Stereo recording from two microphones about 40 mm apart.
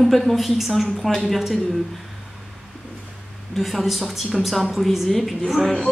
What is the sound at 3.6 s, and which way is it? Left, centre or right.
Speech, centre.